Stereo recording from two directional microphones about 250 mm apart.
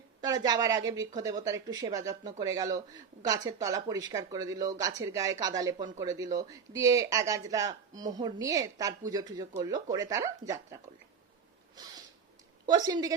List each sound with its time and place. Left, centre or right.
0.2 s speech: centre
11.8 s speech: centre